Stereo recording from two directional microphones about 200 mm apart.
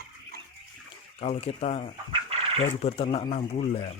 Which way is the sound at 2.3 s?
30° right (ahead or behind).